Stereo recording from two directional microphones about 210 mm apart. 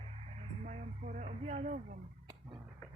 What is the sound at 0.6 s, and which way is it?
Speech, 35° right (ahead or behind).